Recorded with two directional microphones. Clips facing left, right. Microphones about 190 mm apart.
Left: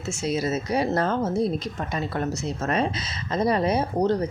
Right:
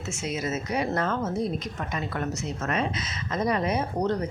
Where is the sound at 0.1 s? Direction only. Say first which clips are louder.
Left 5 dB; 35° left (ahead or behind).